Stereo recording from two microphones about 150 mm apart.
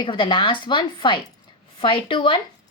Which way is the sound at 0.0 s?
35° left (ahead or behind).